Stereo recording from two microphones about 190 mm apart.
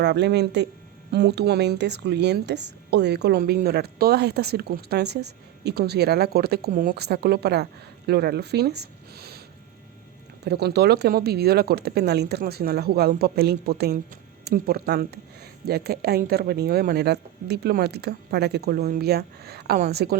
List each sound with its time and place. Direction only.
0.0 s a woman's voice: 65° right (ahead or behind)
10.4 s a woman's voice: 60° right (ahead or behind)